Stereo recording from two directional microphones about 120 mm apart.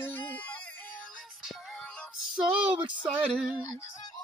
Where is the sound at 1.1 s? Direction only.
Centre (ahead or behind).